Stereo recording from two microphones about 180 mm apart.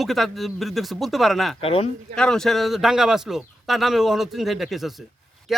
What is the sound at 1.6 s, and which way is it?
Speech, 30° left (ahead or behind).